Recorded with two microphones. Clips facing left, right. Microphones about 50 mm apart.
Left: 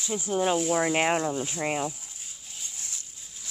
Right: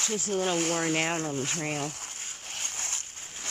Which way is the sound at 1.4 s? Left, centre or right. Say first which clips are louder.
Left 1 dB; right.